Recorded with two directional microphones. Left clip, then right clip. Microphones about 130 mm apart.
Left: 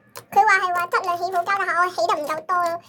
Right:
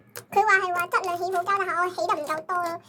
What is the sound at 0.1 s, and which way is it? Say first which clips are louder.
A child's voice: left 4 dB; 5° left (ahead or behind).